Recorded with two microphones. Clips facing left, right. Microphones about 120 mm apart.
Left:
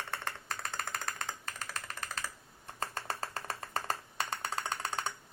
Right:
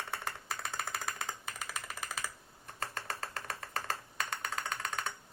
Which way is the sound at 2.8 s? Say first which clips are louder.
Left 2 dB; 35° left (ahead or behind).